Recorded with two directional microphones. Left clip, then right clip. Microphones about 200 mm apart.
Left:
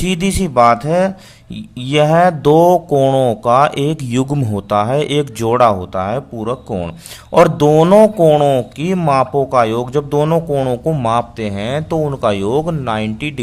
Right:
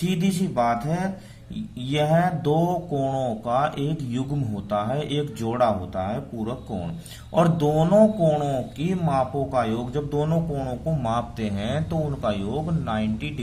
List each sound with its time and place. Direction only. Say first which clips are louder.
0.0 s speech: left 9 dB; 40° left (ahead or behind)